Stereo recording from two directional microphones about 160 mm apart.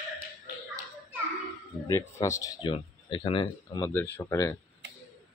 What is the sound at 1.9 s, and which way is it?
Speech, 20° left (ahead or behind).